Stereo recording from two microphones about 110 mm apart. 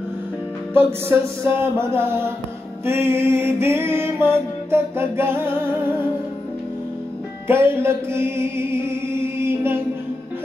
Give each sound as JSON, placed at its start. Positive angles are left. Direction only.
{"t": 1.0, "sound": "mantra", "side_deg": -20}
{"t": 7.4, "sound": "music", "side_deg": -20}